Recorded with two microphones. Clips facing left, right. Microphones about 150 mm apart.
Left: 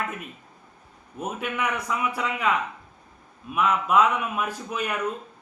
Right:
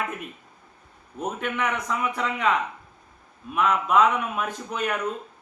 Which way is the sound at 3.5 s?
5° left (ahead or behind).